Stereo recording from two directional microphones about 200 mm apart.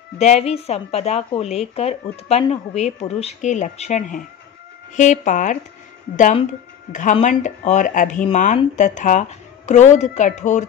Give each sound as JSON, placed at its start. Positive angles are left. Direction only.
{"t": 0.2, "sound": "a woman's voice", "side_deg": 30}
{"t": 6.9, "sound": "a woman's voice", "side_deg": 40}